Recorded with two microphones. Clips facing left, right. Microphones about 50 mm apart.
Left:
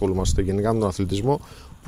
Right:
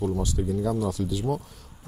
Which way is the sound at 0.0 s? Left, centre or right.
Left.